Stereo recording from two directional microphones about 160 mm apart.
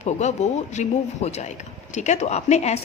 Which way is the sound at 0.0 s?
45° left (ahead or behind).